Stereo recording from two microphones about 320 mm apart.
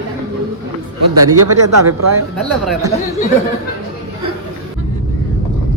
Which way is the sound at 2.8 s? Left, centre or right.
Centre.